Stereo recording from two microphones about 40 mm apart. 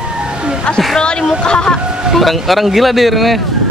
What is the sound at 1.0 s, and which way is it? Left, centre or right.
Speech, left.